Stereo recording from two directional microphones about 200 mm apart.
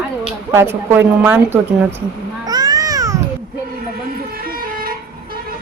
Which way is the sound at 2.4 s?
20° right (ahead or behind).